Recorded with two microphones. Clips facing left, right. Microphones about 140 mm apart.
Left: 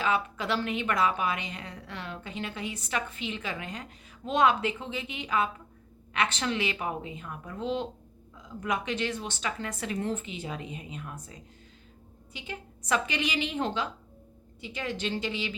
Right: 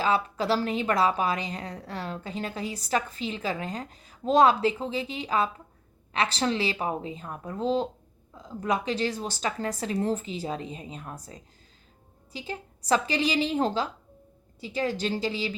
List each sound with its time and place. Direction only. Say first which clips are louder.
0.0 s a woman's voice: right 3 dB; 35° right (ahead or behind)